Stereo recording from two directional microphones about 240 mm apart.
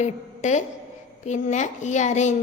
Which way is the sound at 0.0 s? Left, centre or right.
Left.